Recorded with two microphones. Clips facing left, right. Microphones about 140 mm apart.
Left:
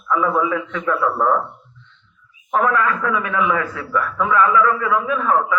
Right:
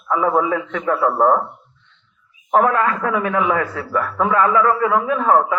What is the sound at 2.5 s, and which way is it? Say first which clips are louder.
A man's voice: right 2 dB; 35° right (ahead or behind).